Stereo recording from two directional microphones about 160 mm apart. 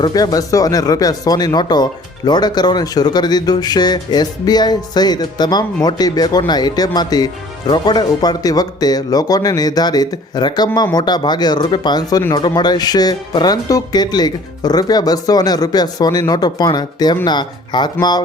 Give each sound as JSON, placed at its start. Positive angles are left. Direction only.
{"t": 0.0, "sound": "speech", "side_deg": 25}